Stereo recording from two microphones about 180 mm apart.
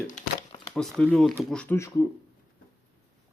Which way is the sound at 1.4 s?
5° left (ahead or behind).